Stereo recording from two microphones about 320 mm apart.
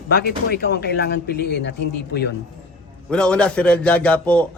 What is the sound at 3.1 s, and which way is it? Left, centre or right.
A man's voice, centre.